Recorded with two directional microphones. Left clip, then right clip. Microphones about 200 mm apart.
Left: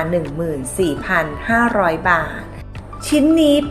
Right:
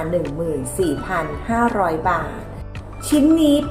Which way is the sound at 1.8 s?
20° left (ahead or behind).